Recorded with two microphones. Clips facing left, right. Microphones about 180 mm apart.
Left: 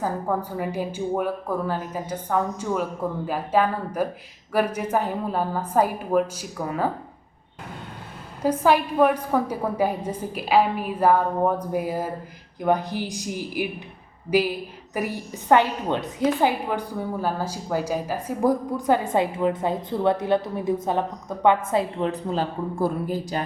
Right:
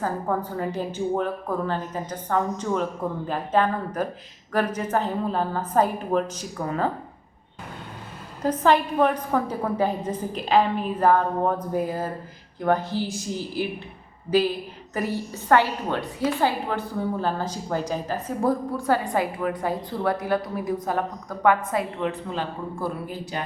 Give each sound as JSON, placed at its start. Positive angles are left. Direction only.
{"t": 0.0, "sound": "a woman's voice", "side_deg": 10}
{"t": 8.4, "sound": "a woman's voice", "side_deg": 10}